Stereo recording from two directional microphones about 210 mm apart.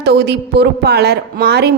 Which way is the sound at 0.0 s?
50° right (ahead or behind).